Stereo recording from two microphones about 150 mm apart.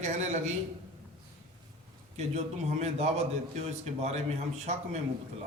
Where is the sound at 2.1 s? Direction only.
45° right (ahead or behind).